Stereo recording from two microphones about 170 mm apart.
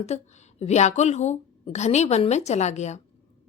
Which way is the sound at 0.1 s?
40° left (ahead or behind).